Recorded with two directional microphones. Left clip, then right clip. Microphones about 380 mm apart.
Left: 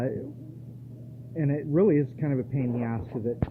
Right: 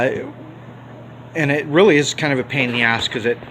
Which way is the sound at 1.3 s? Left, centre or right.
Centre.